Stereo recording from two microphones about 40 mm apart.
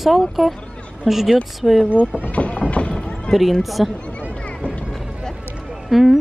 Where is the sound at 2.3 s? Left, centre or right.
Left.